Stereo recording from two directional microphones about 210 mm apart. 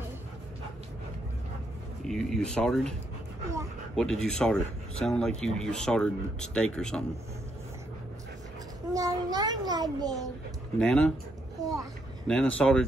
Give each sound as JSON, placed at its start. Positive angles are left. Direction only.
{"t": 2.0, "sound": "speech", "side_deg": 0}
{"t": 3.9, "sound": "speech", "side_deg": 5}
{"t": 8.9, "sound": "a child's voice", "side_deg": -15}
{"t": 10.8, "sound": "speech", "side_deg": 5}
{"t": 11.6, "sound": "a child's voice", "side_deg": -15}
{"t": 12.3, "sound": "speech", "side_deg": 5}